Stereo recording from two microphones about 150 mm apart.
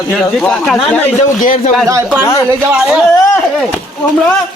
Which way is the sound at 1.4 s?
60° left (ahead or behind).